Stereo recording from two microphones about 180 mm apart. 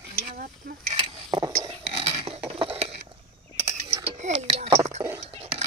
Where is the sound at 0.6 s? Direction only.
55° right (ahead or behind).